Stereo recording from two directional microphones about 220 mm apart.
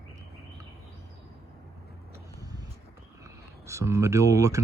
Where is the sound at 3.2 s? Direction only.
15° right (ahead or behind).